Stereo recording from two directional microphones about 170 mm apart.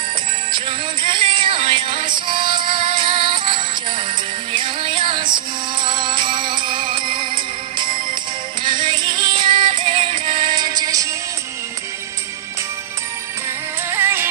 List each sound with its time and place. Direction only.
1.0 s music: 30° right (ahead or behind)
8.6 s music: 30° right (ahead or behind)
13.9 s music: 15° right (ahead or behind)